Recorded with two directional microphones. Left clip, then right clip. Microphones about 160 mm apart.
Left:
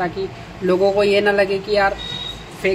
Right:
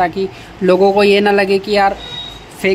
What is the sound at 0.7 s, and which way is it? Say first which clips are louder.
Speech: right 5 dB; 65° right (ahead or behind).